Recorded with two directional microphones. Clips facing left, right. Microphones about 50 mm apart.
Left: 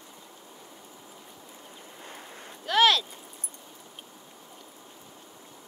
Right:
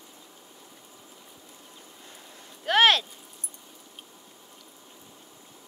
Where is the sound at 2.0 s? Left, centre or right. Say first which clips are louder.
Left 7 dB; left.